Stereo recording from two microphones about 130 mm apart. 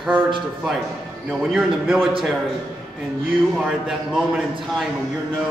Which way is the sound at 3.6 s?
Centre (ahead or behind).